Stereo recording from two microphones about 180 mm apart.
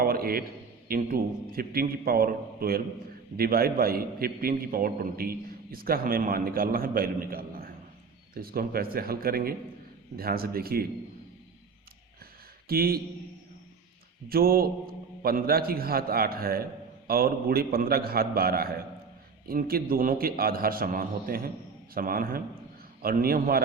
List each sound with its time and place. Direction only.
0.0 s a sound: 55° right (ahead or behind)
0.9 s a man's voice: 55° right (ahead or behind)
12.6 s speech: 55° right (ahead or behind)
14.3 s a man's voice: 55° right (ahead or behind)